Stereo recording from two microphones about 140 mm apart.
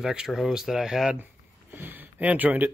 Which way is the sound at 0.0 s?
5° right (ahead or behind).